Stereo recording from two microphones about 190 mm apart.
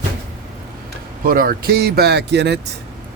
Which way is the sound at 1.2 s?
50° right (ahead or behind).